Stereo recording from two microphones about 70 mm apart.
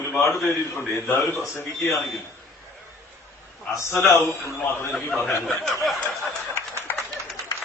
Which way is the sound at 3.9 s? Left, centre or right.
Left.